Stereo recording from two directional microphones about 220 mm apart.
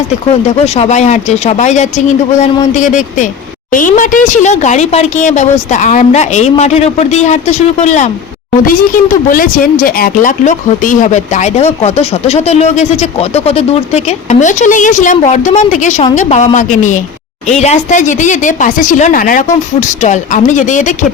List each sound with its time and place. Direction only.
0.4 s speech: 30° left (ahead or behind)